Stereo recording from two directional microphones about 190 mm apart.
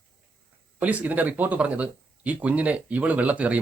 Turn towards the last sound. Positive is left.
turn(degrees=-10)  # may be behind; listen again after turning